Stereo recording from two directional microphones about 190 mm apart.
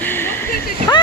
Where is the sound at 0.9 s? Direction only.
20° left (ahead or behind).